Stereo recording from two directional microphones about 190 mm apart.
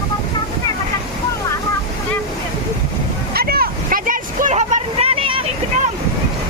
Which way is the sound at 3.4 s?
55° right (ahead or behind).